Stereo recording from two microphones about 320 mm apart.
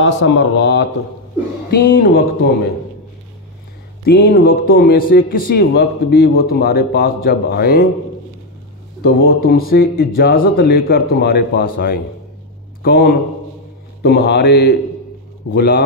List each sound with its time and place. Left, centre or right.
0.2 s a man's voice: left
4.0 s a man's voice: left
9.0 s a man's voice: left